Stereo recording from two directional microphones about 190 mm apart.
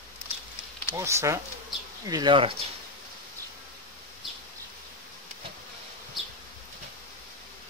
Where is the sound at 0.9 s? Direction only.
15° right (ahead or behind).